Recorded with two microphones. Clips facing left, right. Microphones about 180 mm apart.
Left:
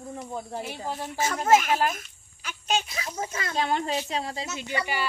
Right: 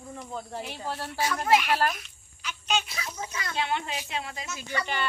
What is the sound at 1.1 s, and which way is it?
Speech, 45° left (ahead or behind).